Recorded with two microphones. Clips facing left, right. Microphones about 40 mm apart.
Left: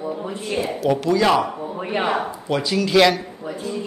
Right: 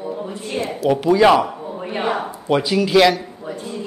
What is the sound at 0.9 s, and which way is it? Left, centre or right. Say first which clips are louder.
Speech: right 5 dB; centre.